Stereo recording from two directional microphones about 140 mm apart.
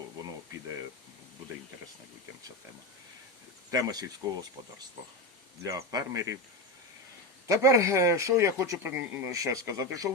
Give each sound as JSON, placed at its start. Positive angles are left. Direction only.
{"t": 3.7, "sound": "speech", "side_deg": -25}
{"t": 5.6, "sound": "speech", "side_deg": -25}
{"t": 7.4, "sound": "speech", "side_deg": -20}